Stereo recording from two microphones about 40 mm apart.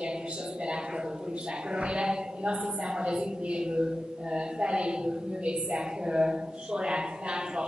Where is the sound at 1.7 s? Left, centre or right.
Right.